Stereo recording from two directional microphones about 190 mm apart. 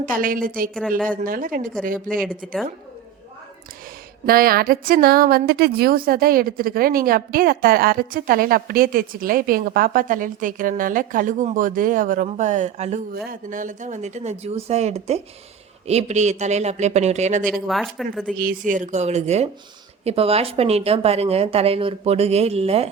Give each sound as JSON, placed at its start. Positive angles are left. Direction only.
{"t": 0.0, "sound": "a woman's voice", "side_deg": -45}
{"t": 2.4, "sound": "speech", "side_deg": 0}
{"t": 4.3, "sound": "a woman's voice", "side_deg": -50}
{"t": 17.4, "sound": "speech", "side_deg": 0}
{"t": 18.3, "sound": "a woman's voice", "side_deg": -45}